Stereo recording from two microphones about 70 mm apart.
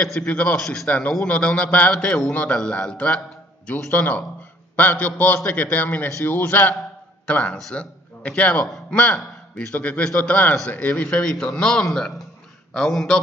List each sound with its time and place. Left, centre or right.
0.0 s a man's voice: centre
0.6 s a man's voice: centre
0.8 s a man's voice: centre
3.6 s a man's voice: left
9.1 s a sound: centre
9.8 s a man's voice: centre
11.1 s a man's voice: centre